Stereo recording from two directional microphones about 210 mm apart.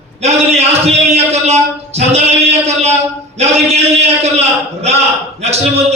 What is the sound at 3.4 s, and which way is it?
Speech, 30° right (ahead or behind).